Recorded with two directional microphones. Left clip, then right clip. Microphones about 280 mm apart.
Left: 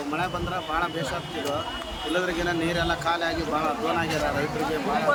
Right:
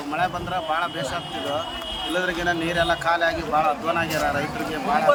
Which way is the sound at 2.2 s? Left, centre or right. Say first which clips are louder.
Right 2 dB; centre.